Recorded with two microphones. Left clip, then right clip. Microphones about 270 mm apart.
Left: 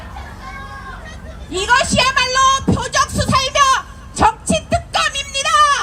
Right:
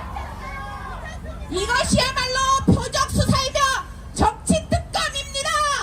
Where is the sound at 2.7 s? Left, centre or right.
Centre.